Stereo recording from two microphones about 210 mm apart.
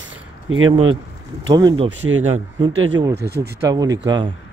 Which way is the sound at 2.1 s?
75° right (ahead or behind).